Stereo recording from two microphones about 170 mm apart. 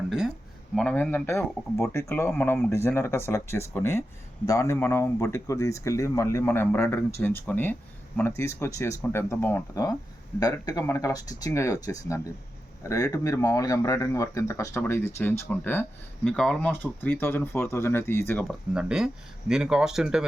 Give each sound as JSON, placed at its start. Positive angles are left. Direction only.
{"t": 0.8, "sound": "speech", "side_deg": 5}
{"t": 18.7, "sound": "speech", "side_deg": -5}